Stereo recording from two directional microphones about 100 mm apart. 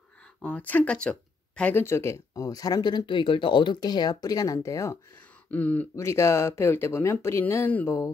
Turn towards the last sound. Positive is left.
turn(degrees=20)  # may be behind; listen again after turning